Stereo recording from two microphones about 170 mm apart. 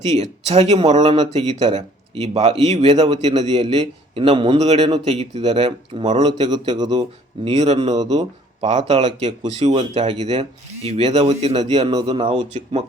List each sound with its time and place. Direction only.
0.2 s a man's voice: 40° right (ahead or behind)
2.9 s a man's voice: 25° right (ahead or behind)
3.2 s a man's voice: 40° right (ahead or behind)
6.2 s a man's voice: 25° right (ahead or behind)
7.4 s a man's voice: 40° right (ahead or behind)
7.9 s a man's voice: 25° right (ahead or behind)
8.6 s a man's voice: 40° right (ahead or behind)
11.9 s a man's voice: 30° right (ahead or behind)